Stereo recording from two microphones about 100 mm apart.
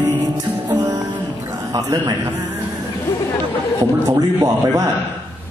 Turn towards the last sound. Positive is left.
turn(degrees=-40)  # may be behind; listen again after turning